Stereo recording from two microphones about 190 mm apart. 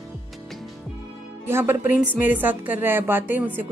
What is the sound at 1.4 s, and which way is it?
A woman's voice, 10° right (ahead or behind).